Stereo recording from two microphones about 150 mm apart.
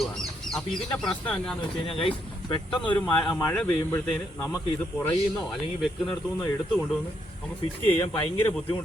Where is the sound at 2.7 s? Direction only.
10° left (ahead or behind).